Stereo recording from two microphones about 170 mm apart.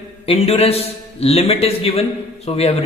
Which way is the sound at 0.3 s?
35° left (ahead or behind).